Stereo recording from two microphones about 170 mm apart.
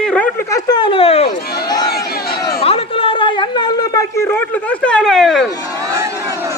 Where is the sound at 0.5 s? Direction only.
25° left (ahead or behind).